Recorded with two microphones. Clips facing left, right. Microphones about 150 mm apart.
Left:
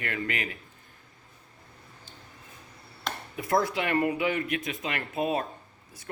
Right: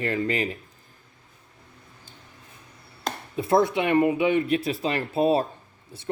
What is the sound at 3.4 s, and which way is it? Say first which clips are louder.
Speech: right 6 dB; 25° right (ahead or behind).